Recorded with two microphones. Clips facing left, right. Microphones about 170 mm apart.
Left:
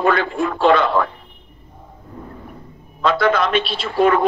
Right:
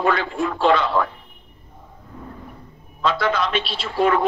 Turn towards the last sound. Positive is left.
turn(degrees=55)  # may be behind; listen again after turning